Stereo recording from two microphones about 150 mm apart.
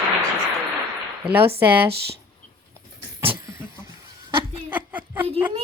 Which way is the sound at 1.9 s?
90° right.